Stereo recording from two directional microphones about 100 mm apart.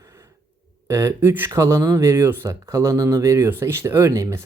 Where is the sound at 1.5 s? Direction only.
30° right (ahead or behind).